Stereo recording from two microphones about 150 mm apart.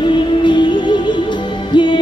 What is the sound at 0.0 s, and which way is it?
Music, 30° left (ahead or behind).